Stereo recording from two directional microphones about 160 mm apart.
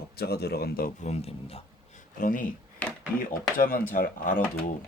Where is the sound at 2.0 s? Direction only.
60° left (ahead or behind).